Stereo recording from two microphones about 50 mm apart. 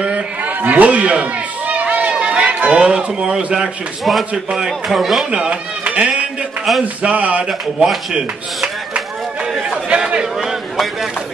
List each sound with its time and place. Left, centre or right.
0.6 s run: right; by 3.4 s centre
3.5 s a man's voice: centre
4.3 s speech: right
4.6 s a man's voice: centre
5.3 s speech: centre
5.9 s a sound: right
7.0 s speech: right
7.4 s a man's voice: centre
9.8 s a sound: right
10.4 s a sound: centre